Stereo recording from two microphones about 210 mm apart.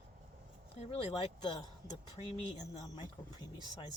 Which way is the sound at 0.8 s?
25° left (ahead or behind).